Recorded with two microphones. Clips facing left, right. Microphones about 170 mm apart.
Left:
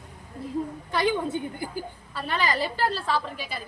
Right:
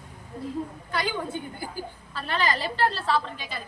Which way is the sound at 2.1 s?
10° left (ahead or behind).